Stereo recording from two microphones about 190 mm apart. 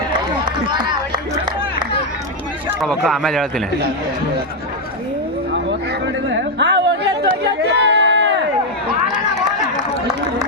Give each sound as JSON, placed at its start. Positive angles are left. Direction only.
{"t": 0.4, "sound": "run", "side_deg": -25}
{"t": 2.8, "sound": "speech", "side_deg": 0}
{"t": 6.3, "sound": "a sound", "side_deg": -75}
{"t": 7.2, "sound": "chatter", "side_deg": -60}
{"t": 8.9, "sound": "run", "side_deg": -25}